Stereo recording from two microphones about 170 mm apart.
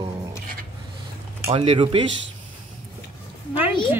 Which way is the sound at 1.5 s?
35° right (ahead or behind).